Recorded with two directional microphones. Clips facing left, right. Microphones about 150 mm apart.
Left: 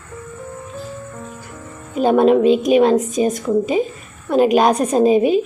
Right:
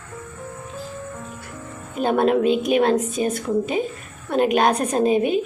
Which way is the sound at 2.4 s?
40° left (ahead or behind).